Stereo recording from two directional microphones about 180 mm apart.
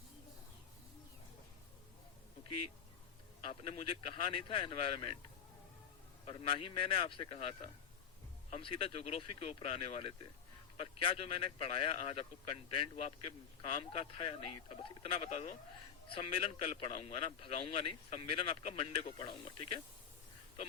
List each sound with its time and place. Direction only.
3.4 s speech: 30° left (ahead or behind)
6.2 s a man's voice: 30° left (ahead or behind)